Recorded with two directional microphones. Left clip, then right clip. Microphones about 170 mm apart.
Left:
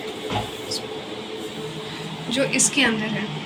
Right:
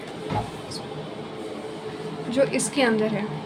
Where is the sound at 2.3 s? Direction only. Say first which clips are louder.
Left 2 dB; 70° right (ahead or behind).